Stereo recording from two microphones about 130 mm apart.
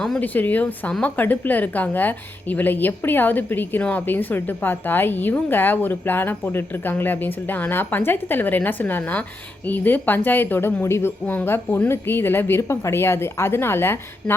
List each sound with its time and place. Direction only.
0.0 s a woman's voice: 10° left (ahead or behind)